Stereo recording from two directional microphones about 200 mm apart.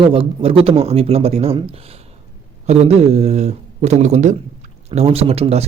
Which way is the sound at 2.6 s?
30° right (ahead or behind).